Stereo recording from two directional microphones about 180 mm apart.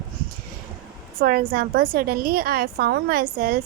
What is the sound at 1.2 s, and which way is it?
A woman's voice, 55° right (ahead or behind).